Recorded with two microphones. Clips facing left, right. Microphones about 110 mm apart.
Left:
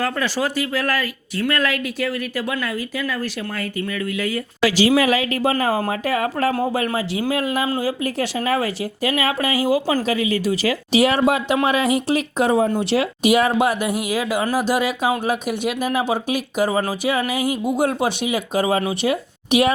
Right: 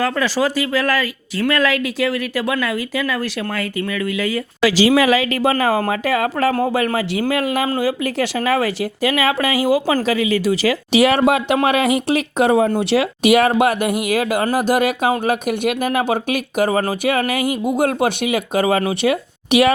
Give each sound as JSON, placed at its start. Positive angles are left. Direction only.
{"t": 0.0, "sound": "speech", "side_deg": -90}
{"t": 7.8, "sound": "speech", "side_deg": -90}